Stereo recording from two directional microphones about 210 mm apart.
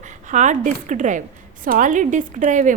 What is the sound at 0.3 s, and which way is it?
A woman's voice, 35° right (ahead or behind).